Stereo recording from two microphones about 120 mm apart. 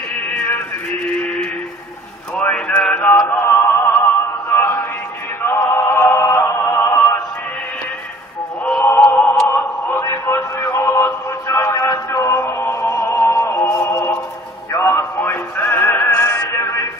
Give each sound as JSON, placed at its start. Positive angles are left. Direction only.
{"t": 0.1, "sound": "male singing", "side_deg": 10}
{"t": 2.3, "sound": "music", "side_deg": 10}
{"t": 5.4, "sound": "choir", "side_deg": 20}
{"t": 8.8, "sound": "synthetic singing", "side_deg": 15}
{"t": 9.8, "sound": "a sound", "side_deg": 20}
{"t": 13.5, "sound": "music", "side_deg": 25}